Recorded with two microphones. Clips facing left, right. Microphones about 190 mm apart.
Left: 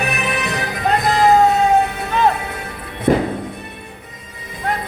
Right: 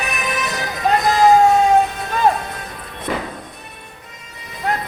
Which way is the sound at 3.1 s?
50° left (ahead or behind).